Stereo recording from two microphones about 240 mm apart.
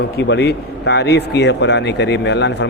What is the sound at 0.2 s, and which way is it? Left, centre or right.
A man's voice, left.